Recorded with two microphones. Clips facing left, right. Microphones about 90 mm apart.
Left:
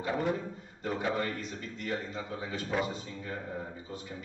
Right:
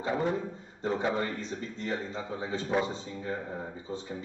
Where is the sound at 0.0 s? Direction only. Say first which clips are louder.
Right 2 dB; 25° right (ahead or behind).